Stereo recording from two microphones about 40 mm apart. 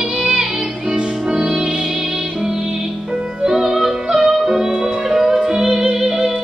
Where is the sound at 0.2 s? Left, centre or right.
Centre.